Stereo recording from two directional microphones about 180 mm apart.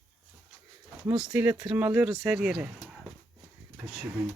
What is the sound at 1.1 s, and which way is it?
Speech, 5° right (ahead or behind).